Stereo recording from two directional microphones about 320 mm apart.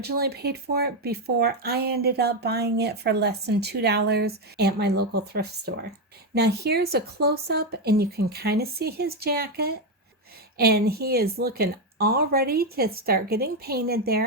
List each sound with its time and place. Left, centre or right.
0.0 s a woman's voice: right